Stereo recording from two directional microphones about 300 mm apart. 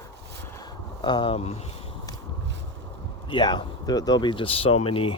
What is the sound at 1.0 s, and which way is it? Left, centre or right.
Speech, centre.